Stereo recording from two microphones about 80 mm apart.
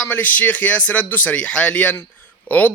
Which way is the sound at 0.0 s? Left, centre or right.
Left.